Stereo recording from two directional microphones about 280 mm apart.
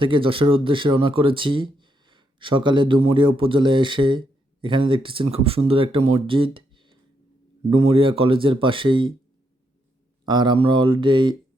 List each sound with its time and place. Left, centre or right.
0.0 s speech: centre
10.2 s speech: centre